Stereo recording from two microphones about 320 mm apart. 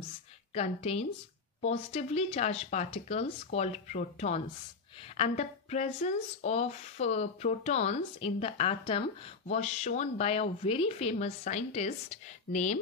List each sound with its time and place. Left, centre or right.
0.6 s speech: centre